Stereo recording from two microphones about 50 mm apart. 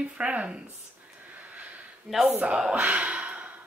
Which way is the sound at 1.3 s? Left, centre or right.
Right.